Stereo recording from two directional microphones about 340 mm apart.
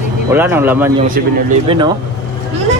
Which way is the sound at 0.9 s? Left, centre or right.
Right.